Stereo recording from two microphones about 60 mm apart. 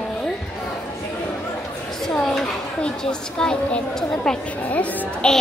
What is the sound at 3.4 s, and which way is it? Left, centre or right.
Speech, centre.